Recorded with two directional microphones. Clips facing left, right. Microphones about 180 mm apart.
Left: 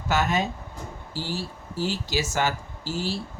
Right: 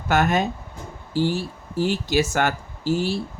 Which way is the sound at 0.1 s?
55° right (ahead or behind).